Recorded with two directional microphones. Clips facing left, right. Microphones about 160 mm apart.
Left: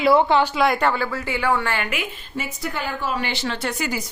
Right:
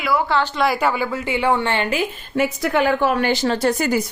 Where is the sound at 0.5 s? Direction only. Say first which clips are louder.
Even; centre (ahead or behind); by 2.0 s 30° right (ahead or behind).